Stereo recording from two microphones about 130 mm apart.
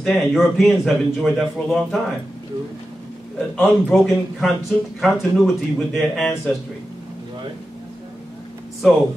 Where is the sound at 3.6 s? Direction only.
Centre (ahead or behind).